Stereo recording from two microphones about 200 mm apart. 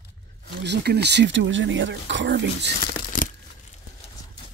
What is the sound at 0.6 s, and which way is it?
Speech, 55° right (ahead or behind).